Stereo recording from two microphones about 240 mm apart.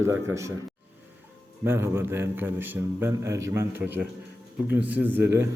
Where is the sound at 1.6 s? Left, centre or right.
Centre.